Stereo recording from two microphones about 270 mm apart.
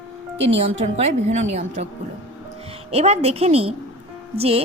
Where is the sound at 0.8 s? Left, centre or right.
Right.